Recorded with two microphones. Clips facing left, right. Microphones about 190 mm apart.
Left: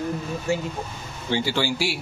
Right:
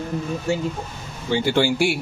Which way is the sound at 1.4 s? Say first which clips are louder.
Right 6 dB; 55° right (ahead or behind).